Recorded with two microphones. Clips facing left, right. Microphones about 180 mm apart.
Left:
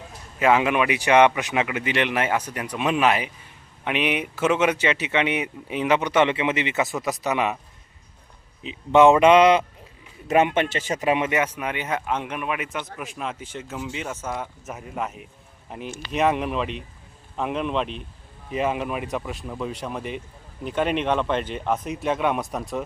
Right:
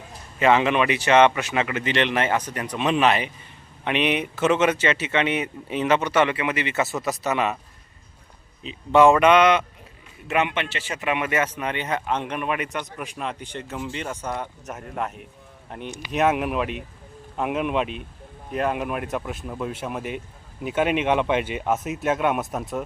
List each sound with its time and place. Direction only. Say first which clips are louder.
0.3 s speech: right 1 dB; 5° left (ahead or behind)
8.6 s speech: left 1 dB; 20° left (ahead or behind)
10.2 s speech: left 4 dB; 40° left (ahead or behind)
11.2 s speech: left 1 dB; 15° left (ahead or behind); by 22.6 s 5° right (ahead or behind)